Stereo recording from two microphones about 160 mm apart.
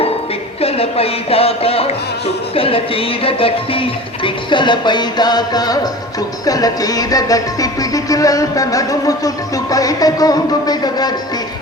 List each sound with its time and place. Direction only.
0.6 s music: 40° left (ahead or behind)